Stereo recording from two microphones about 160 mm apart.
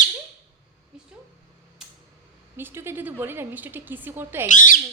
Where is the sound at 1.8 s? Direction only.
5° right (ahead or behind).